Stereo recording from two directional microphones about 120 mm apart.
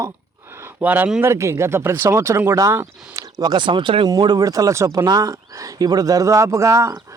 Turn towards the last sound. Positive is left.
turn(degrees=-25)  # may be behind; listen again after turning